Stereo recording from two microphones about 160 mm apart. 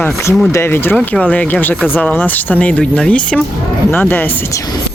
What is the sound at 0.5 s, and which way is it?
Speech, 15° left (ahead or behind).